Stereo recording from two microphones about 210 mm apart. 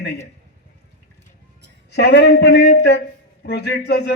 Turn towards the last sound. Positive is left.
turn(degrees=55)  # may be behind; listen again after turning